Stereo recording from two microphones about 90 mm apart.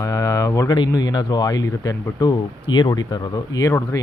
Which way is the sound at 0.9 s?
50° left (ahead or behind).